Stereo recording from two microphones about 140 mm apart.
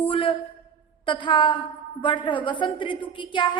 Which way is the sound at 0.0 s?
40° left (ahead or behind).